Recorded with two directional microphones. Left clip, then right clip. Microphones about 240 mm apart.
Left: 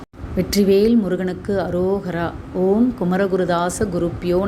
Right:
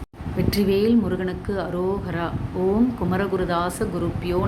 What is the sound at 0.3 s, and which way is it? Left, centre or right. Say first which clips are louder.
A woman's voice: left 5 dB; centre.